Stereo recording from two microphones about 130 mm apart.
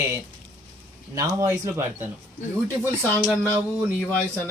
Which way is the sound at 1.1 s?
30° right (ahead or behind).